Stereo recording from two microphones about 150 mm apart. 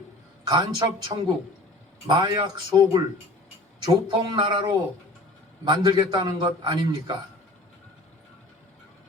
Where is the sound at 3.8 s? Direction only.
35° right (ahead or behind).